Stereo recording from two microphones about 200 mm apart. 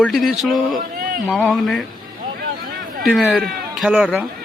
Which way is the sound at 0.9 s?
50° right (ahead or behind).